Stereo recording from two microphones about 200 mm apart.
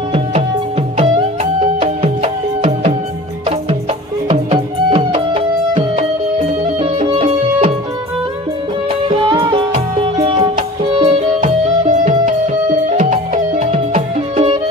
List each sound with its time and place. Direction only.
0.9 s music: 30° right (ahead or behind)
4.3 s music: 25° right (ahead or behind)
9.1 s music: 25° right (ahead or behind)